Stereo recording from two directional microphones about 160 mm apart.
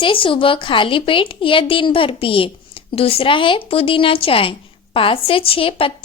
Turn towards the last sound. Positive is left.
turn(degrees=35)  # may be behind; listen again after turning